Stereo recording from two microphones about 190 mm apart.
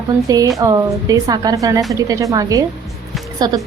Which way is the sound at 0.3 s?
20° right (ahead or behind).